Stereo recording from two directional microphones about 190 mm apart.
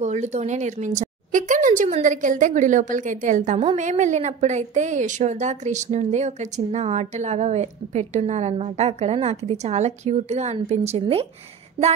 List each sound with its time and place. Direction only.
0.0 s a woman's voice: 35° right (ahead or behind)